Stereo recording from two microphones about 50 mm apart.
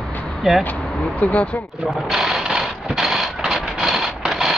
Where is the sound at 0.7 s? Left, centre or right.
Left.